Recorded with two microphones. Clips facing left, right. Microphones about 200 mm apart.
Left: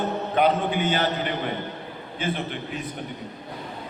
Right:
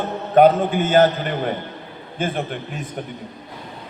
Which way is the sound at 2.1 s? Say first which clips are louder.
Right 4 dB; 50° right (ahead or behind).